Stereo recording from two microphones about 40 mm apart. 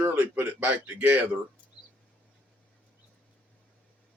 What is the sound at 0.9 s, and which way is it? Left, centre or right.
Speech, right.